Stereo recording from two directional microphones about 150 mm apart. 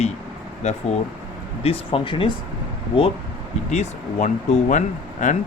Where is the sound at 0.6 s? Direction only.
45° left (ahead or behind).